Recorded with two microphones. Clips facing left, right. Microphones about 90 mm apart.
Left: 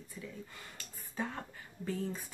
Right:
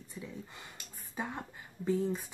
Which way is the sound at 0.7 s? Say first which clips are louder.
Left 1 dB; 15° right (ahead or behind).